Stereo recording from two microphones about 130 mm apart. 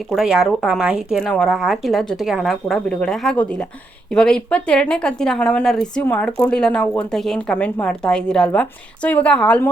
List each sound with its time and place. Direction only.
0.1 s speech: centre (ahead or behind)
1.2 s a woman's voice: 5° left (ahead or behind)